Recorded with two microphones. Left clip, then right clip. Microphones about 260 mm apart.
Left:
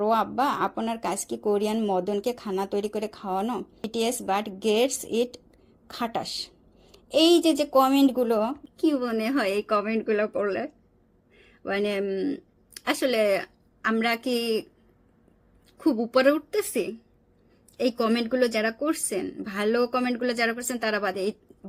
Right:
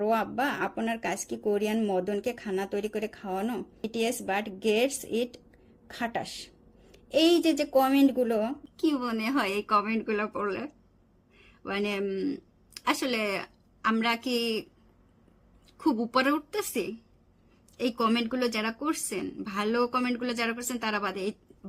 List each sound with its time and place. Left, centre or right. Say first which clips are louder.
0.0 s speech: left 4 dB; centre
8.8 s a woman's voice: left 4 dB; centre
15.8 s speech: left 5 dB; centre